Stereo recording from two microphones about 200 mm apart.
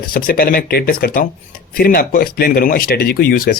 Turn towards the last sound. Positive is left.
turn(degrees=45)  # may be behind; listen again after turning